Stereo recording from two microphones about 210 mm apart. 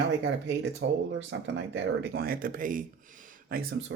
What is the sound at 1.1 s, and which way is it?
Speech, 60° right (ahead or behind).